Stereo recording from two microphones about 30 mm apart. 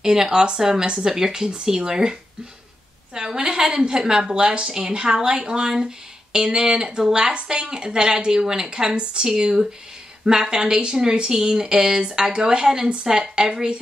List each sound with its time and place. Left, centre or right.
0.0 s speech: centre
3.2 s speech: centre; by 4.7 s right
4.7 s speech: right